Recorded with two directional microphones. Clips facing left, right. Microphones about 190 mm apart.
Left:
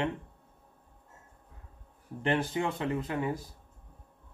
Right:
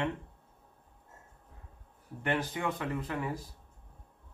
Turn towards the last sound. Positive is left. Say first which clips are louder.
# left 4 dB
turn(degrees=25)  # may be behind; listen again after turning